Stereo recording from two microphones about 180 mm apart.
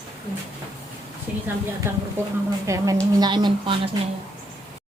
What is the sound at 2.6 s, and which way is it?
A woman's voice, 20° right (ahead or behind).